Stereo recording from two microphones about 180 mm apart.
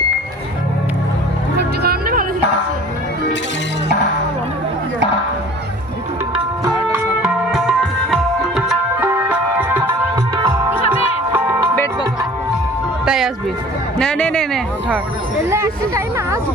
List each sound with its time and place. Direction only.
1.5 s music: 60° right (ahead or behind)
7.2 s tabla: centre (ahead or behind)
10.6 s music: 10° right (ahead or behind)
13.1 s music: centre (ahead or behind)
14.0 s speech: 5° left (ahead or behind)
15.4 s speech: 15° right (ahead or behind)